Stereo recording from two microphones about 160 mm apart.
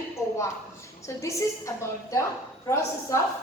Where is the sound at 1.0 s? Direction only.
20° left (ahead or behind).